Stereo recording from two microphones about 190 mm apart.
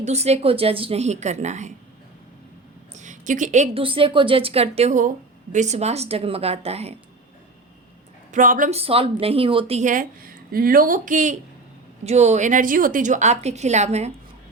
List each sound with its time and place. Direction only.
0.0 s a woman's voice: 35° right (ahead or behind)
2.9 s a woman's voice: 40° right (ahead or behind)
8.3 s speech: 45° right (ahead or behind)
8.8 s a woman's voice: 30° right (ahead or behind)